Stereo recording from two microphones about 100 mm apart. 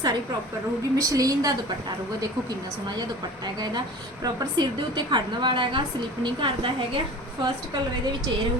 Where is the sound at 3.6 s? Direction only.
40° right (ahead or behind); by 6.7 s 60° right (ahead or behind).